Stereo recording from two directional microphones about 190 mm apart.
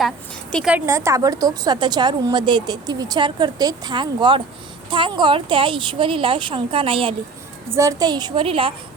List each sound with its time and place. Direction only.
0.5 s a woman's voice: 5° right (ahead or behind)
0.9 s a woman's voice: 15° right (ahead or behind)
7.7 s a woman's voice: 15° right (ahead or behind)